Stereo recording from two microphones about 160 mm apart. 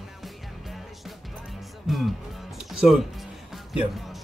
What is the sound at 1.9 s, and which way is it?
Speech, 5° right (ahead or behind).